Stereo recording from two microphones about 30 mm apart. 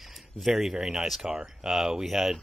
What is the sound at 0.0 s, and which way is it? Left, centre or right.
Speech, centre.